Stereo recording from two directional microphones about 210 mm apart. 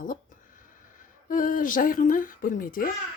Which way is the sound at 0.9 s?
40° left (ahead or behind).